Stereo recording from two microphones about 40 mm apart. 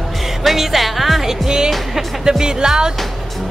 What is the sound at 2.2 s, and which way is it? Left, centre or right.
Music, centre.